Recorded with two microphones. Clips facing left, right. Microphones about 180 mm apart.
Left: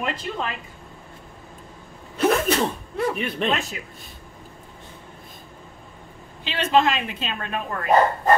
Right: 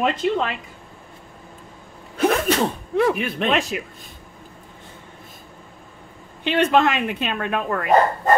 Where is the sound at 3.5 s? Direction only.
90° right.